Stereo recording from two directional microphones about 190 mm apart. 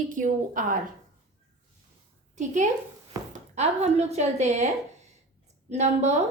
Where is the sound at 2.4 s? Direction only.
40° right (ahead or behind).